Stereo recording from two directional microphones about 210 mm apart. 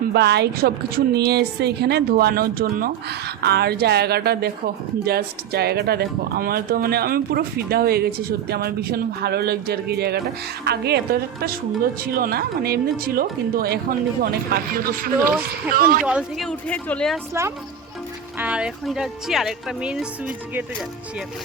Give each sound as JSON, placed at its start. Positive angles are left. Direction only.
{"t": 0.1, "sound": "a woman's voice", "side_deg": -50}
{"t": 16.0, "sound": "speech", "side_deg": 0}
{"t": 18.3, "sound": "speech", "side_deg": -5}